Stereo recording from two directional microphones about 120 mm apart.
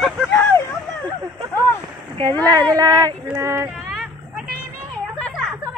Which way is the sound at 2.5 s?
30° right (ahead or behind).